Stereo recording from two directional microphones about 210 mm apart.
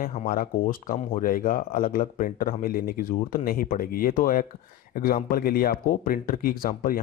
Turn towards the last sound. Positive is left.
turn(degrees=45)  # may be behind; listen again after turning